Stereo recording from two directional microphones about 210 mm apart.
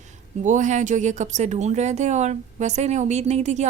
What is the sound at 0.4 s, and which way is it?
A woman's voice, 35° right (ahead or behind).